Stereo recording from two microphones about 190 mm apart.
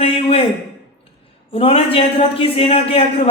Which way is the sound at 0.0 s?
30° left (ahead or behind).